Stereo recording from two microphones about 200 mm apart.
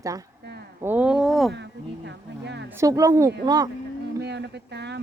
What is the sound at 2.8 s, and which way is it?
Speech, 15° right (ahead or behind).